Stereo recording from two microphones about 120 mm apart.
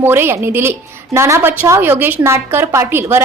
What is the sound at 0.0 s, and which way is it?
A woman's voice, 20° right (ahead or behind).